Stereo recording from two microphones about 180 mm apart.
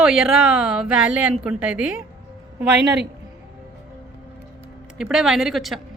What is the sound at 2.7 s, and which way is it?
Speech, 70° right (ahead or behind).